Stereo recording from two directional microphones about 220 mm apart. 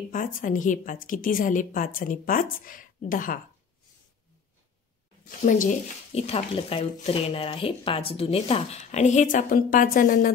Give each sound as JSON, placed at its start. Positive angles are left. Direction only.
{"t": 0.1, "sound": "speech", "side_deg": 40}
{"t": 5.4, "sound": "speech", "side_deg": 35}